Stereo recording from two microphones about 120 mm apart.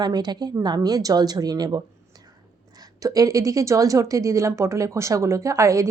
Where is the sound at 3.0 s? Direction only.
30° right (ahead or behind).